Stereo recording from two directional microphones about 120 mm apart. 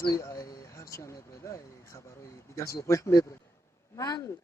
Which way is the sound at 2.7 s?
25° left (ahead or behind).